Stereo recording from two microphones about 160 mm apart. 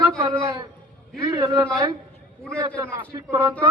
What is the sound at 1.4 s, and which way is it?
A man's voice, 20° right (ahead or behind).